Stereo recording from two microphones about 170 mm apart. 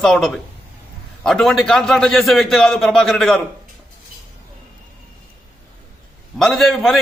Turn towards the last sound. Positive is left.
turn(degrees=0)  # may be behind; listen again after turning